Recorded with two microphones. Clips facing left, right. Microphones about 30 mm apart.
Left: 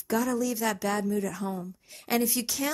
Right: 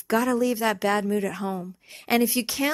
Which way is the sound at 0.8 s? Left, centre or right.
Right.